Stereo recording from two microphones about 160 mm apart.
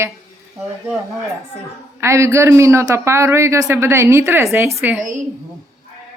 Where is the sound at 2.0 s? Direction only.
15° right (ahead or behind).